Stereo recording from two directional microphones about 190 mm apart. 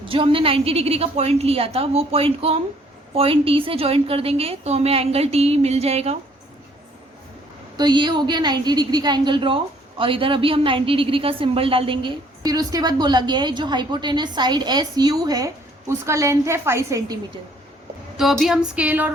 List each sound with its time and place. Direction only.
0.0 s a woman's voice: 25° right (ahead or behind)
7.8 s a woman's voice: 25° right (ahead or behind)
18.2 s a sound: centre (ahead or behind)